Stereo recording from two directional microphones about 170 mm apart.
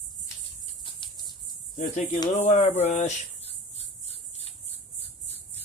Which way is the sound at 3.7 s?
40° left (ahead or behind).